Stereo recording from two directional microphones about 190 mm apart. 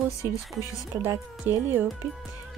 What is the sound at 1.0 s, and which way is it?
Speech, 10° right (ahead or behind).